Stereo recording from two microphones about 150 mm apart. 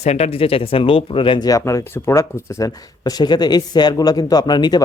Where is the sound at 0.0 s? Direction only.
45° left (ahead or behind).